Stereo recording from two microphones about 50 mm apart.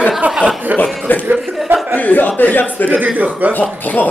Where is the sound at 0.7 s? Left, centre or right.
Right.